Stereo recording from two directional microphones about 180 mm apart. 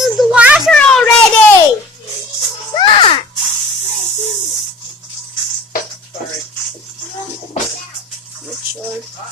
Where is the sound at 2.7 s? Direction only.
25° left (ahead or behind).